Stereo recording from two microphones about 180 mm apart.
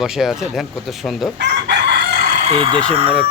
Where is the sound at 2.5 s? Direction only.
30° right (ahead or behind).